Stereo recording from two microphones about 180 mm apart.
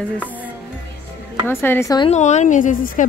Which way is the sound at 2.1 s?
40° left (ahead or behind).